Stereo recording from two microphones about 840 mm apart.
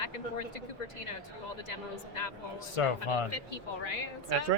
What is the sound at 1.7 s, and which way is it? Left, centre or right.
Speech, left.